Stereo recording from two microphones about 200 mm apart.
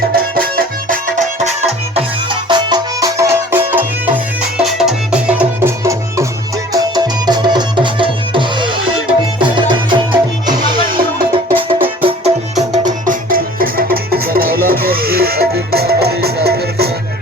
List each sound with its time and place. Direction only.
0.3 s music: 45° right (ahead or behind)
1.6 s music: 25° right (ahead or behind)
13.1 s music: 45° right (ahead or behind)